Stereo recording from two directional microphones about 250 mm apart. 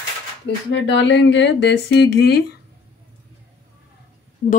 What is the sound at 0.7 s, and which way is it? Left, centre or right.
Speech, left.